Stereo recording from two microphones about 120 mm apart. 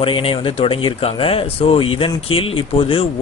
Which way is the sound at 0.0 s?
50° left (ahead or behind).